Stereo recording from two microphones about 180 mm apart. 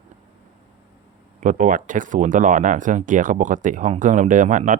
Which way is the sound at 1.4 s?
45° right (ahead or behind).